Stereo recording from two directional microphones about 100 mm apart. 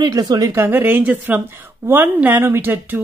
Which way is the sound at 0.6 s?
20° right (ahead or behind).